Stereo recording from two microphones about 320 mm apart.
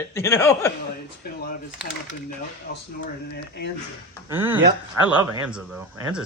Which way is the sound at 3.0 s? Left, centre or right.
Left.